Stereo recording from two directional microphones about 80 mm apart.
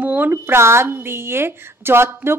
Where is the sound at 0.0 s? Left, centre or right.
Right.